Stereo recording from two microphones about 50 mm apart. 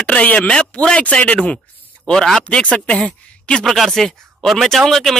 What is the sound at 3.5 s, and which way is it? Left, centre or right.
Speech, centre.